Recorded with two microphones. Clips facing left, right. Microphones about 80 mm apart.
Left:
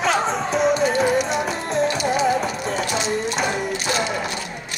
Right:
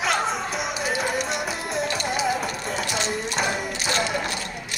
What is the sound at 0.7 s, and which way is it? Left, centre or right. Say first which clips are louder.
Music: left 7 dB; centre.